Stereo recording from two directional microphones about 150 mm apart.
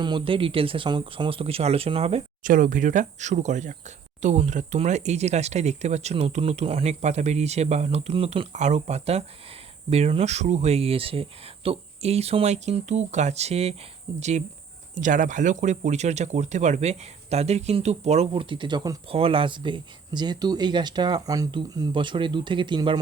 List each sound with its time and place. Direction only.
0.0 s speech: 35° right (ahead or behind)
2.4 s speech: 60° right (ahead or behind); by 18.9 s 30° right (ahead or behind)
19.0 s speech: 40° right (ahead or behind)